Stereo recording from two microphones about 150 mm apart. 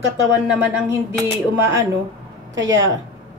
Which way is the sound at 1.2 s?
15° right (ahead or behind).